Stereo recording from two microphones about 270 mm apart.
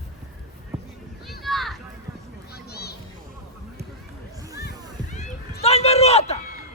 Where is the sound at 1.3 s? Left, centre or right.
Centre.